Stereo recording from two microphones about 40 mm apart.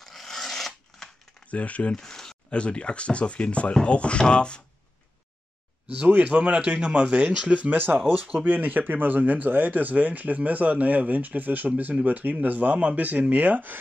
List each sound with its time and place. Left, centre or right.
0.0 s filing: centre
1.5 s speech: left
2.0 s speech: centre
2.5 s speech: left
6.2 s speech: right
7.7 s speech: right
8.1 s speech: right
8.5 s speech: right